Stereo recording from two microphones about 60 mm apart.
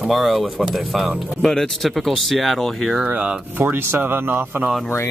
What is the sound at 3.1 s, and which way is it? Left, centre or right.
Speech, right.